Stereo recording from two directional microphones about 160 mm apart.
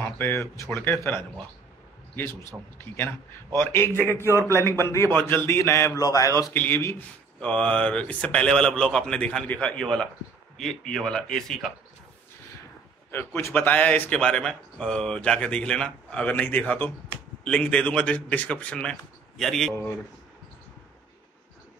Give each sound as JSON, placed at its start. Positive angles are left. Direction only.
{"t": 0.0, "sound": "speech", "side_deg": 15}
{"t": 2.8, "sound": "speech", "side_deg": 15}
{"t": 13.1, "sound": "speech", "side_deg": 15}